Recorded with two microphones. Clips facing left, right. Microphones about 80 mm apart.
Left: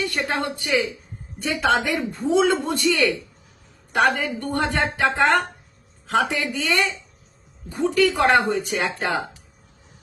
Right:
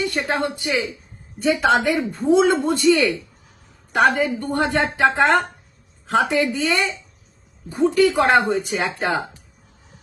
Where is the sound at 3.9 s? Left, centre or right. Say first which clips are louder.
Right 3 dB; right.